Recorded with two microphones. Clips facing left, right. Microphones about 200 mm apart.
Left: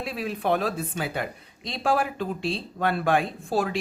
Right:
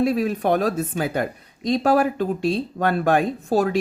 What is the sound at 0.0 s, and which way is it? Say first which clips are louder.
Speech: right 9 dB; 45° right (ahead or behind).